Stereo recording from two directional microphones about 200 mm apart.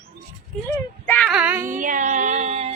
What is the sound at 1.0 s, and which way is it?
Child singing, 10° left (ahead or behind).